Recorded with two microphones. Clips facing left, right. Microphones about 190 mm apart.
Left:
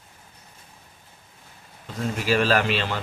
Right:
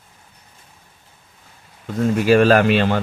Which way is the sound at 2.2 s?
50° right (ahead or behind).